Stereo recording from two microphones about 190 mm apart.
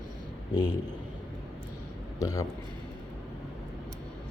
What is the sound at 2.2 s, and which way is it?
Speech, 15° left (ahead or behind).